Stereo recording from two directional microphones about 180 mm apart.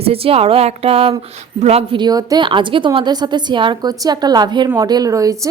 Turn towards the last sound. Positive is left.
turn(degrees=-20)  # may be behind; listen again after turning